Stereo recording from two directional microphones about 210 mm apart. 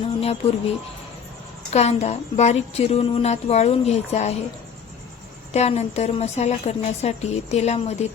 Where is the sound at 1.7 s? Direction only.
30° left (ahead or behind).